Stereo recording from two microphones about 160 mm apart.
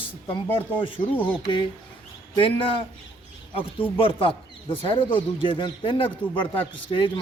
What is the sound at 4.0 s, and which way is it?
Speech, 35° left (ahead or behind).